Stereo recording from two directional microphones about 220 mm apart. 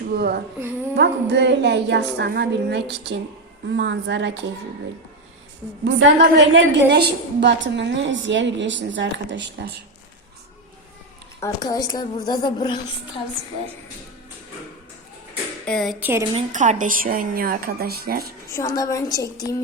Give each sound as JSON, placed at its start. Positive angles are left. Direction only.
{"t": 0.1, "sound": "a woman's voice", "side_deg": -45}
{"t": 5.8, "sound": "a woman's voice", "side_deg": -55}
{"t": 11.3, "sound": "a woman's voice", "side_deg": 15}
{"t": 15.6, "sound": "speech", "side_deg": 0}
{"t": 16.3, "sound": "a woman's voice", "side_deg": -35}
{"t": 18.5, "sound": "a woman's voice", "side_deg": 15}